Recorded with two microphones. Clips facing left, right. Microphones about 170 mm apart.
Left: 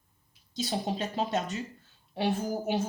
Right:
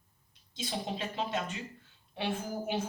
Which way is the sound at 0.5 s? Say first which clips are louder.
Left 5 dB; 40° left (ahead or behind).